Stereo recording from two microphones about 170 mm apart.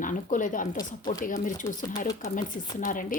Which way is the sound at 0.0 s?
50° left (ahead or behind).